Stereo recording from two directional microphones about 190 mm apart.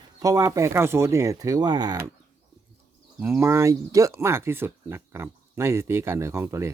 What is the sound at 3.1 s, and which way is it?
Speech, 10° right (ahead or behind).